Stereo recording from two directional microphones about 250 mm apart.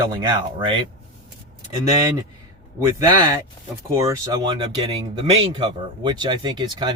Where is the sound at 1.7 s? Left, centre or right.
Centre.